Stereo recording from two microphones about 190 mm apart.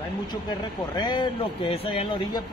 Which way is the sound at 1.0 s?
25° left (ahead or behind).